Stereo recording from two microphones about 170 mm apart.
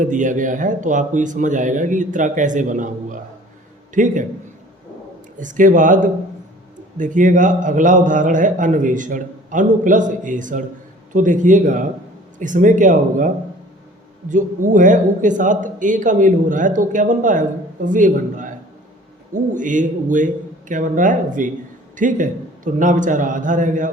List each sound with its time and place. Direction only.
0.0 s a man's voice: 50° right (ahead or behind)
5.4 s a man's voice: 50° right (ahead or behind)